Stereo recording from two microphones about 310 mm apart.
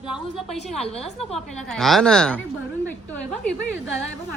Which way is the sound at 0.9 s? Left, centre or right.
Centre.